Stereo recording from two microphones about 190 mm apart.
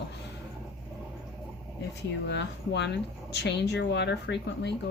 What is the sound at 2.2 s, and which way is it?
Speech, 65° left (ahead or behind).